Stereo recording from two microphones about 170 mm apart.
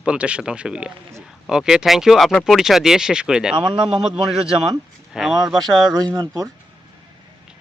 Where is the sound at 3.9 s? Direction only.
5° right (ahead or behind).